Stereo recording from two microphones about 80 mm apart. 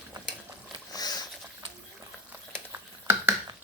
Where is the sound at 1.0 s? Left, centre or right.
Left.